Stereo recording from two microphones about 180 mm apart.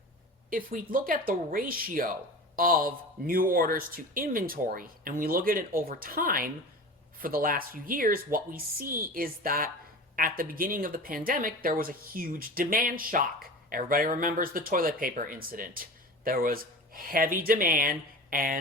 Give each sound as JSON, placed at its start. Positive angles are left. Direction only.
{"t": 0.5, "sound": "speech", "side_deg": -50}